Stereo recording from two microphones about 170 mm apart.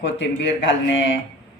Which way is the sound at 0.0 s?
90° left.